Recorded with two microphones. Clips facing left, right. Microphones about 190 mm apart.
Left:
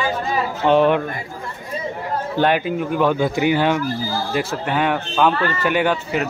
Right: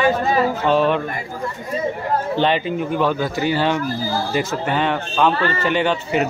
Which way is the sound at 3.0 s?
15° left (ahead or behind).